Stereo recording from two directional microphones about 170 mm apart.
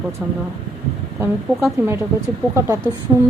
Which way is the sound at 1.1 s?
15° right (ahead or behind).